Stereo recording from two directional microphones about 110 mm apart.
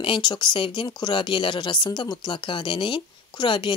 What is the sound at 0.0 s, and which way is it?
Speech, 45° left (ahead or behind).